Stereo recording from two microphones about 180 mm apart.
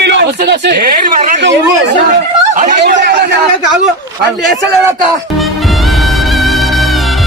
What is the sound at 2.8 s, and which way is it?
Speech, 70° right (ahead or behind).